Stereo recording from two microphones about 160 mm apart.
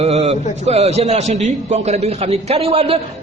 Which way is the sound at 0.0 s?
45° right (ahead or behind).